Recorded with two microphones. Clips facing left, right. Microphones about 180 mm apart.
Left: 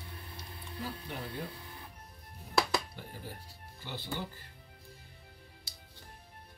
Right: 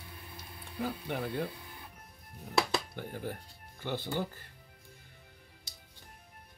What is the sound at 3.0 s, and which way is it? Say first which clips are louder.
Speech: right 7 dB; 55° right (ahead or behind).